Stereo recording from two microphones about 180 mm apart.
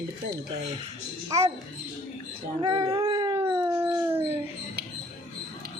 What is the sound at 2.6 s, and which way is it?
Howl, 20° right (ahead or behind).